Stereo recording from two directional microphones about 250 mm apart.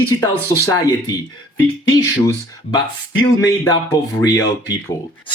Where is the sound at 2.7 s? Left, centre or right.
Centre.